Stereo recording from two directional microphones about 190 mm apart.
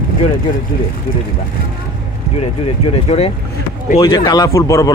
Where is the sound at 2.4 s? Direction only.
30° left (ahead or behind).